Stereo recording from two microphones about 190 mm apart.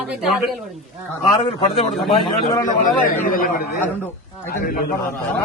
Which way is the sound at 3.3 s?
45° left (ahead or behind).